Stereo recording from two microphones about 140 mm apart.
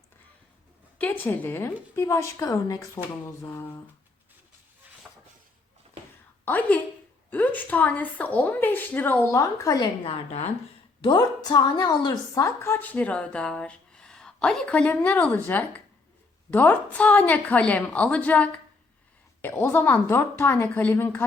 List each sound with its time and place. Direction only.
0.9 s a woman's voice: 10° left (ahead or behind)
6.4 s a woman's voice: 10° left (ahead or behind)
10.0 s a woman's voice: 45° left (ahead or behind)
11.0 s speech: 30° left (ahead or behind); by 21.2 s 15° left (ahead or behind)